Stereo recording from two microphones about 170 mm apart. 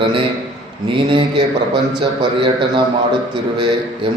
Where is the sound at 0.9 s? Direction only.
30° right (ahead or behind).